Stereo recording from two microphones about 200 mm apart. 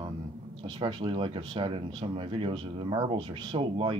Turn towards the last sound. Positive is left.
turn(degrees=-25)  # may be behind; listen again after turning